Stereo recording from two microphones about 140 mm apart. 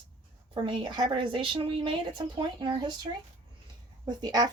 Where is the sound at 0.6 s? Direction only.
35° right (ahead or behind).